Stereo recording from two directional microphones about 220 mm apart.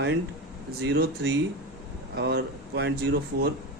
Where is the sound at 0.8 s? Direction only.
50° right (ahead or behind).